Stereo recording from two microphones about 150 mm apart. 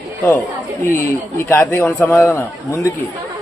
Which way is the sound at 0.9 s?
15° left (ahead or behind).